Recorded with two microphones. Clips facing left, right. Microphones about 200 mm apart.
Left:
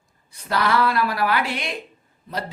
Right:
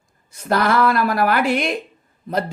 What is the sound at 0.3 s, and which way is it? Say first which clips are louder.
Speech: right 4 dB; 45° right (ahead or behind).